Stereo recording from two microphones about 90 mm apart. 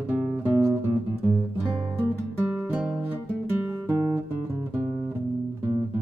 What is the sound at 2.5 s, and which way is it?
Music, 15° right (ahead or behind).